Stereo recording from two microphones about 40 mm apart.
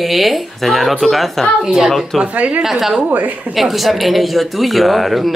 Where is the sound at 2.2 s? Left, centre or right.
Right.